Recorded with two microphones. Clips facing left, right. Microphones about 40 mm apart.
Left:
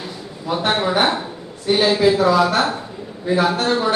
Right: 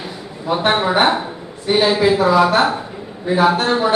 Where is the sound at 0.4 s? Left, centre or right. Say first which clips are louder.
Right 3 dB; right.